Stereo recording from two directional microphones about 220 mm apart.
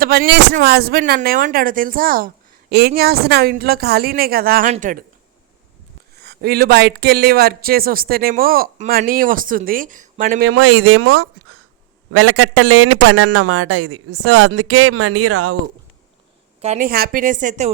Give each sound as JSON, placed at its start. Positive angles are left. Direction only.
{"t": 0.0, "sound": "speech", "side_deg": -45}
{"t": 6.1, "sound": "speech", "side_deg": -45}
{"t": 10.4, "sound": "a man's voice", "side_deg": -75}
{"t": 16.6, "sound": "speech", "side_deg": -30}